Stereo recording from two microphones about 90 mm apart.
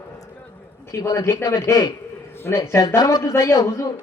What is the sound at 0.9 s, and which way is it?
A man's voice, 35° left (ahead or behind).